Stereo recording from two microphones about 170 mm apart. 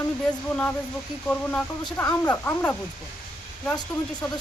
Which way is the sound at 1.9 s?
15° left (ahead or behind).